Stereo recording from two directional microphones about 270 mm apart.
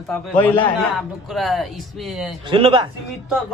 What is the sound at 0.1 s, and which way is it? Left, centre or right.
A man's voice, centre.